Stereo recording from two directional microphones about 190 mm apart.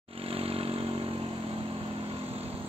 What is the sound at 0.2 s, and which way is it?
Vehicle, 30° right (ahead or behind).